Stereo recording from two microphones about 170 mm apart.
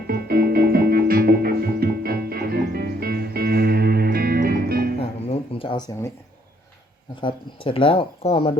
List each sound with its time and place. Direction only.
0.1 s music: 60° right (ahead or behind)
4.9 s music: 35° left (ahead or behind)
7.2 s speech: 30° left (ahead or behind)